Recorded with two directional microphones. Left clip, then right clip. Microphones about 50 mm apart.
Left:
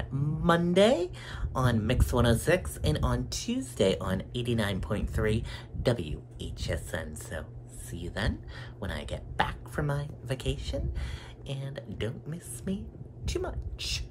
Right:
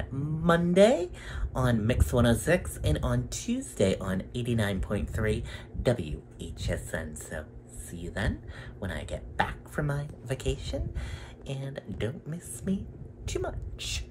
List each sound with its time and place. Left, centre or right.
0.1 s speech: left